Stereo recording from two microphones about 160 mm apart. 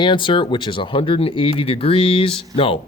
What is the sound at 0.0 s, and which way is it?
Speech, 30° left (ahead or behind).